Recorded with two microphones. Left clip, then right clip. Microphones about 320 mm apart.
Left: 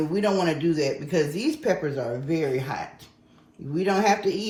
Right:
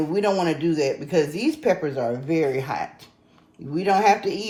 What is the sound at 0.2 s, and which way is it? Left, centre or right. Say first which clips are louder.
Speech: right 2 dB; centre.